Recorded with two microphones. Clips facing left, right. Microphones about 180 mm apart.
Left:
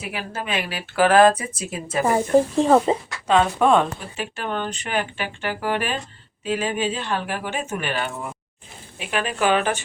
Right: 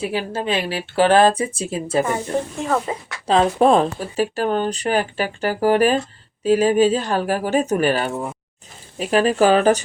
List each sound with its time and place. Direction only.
0.0 s speech: 30° right (ahead or behind)
2.6 s speech: 30° left (ahead or behind)
3.2 s speech: 35° right (ahead or behind)